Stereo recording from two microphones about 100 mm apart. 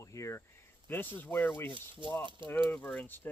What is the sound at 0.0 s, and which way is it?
Speech, 30° left (ahead or behind).